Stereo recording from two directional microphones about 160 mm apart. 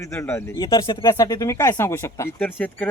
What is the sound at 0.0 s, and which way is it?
Speech, 15° left (ahead or behind).